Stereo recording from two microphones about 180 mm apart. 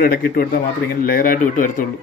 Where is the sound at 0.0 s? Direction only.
55° left (ahead or behind).